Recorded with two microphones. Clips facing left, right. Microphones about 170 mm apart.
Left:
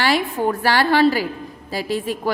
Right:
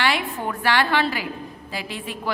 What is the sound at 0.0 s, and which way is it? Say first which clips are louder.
A woman's voice: left 5 dB; 40° left (ahead or behind).